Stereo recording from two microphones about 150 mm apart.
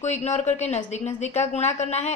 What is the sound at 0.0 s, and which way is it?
A woman's voice, 50° left (ahead or behind).